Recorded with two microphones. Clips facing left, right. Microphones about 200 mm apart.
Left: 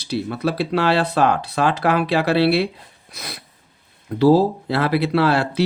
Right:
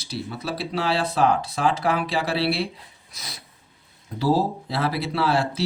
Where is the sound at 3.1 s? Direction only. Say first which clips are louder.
Left 7 dB; 60° left (ahead or behind).